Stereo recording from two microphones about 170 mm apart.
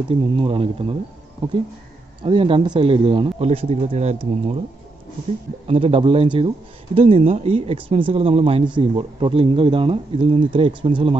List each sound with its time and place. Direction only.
0.1 s speech: 35° right (ahead or behind)
2.2 s speech: 30° right (ahead or behind)
5.7 s speech: 35° right (ahead or behind)